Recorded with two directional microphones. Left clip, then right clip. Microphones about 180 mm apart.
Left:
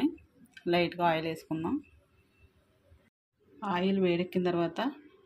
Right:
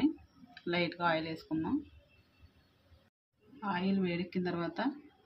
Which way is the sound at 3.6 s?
20° left (ahead or behind).